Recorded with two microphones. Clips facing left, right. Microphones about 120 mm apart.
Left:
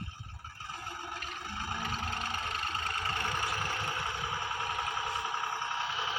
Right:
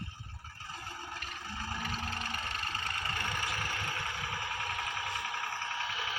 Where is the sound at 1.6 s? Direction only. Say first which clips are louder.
Left 1 dB; 20° left (ahead or behind).